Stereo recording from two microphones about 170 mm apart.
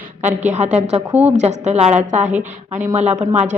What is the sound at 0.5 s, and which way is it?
A woman's voice, 40° right (ahead or behind).